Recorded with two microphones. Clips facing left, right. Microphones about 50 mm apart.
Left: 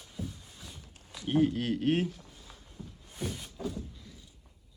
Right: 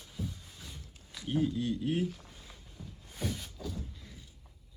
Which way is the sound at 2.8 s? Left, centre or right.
Centre.